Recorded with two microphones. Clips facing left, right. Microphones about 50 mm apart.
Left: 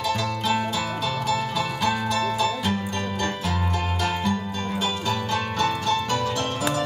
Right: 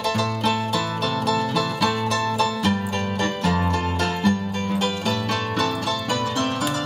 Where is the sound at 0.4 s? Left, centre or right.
Right.